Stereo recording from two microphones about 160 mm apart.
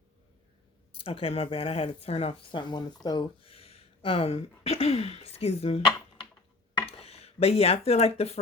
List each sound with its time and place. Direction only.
1.0 s speech: 35° left (ahead or behind)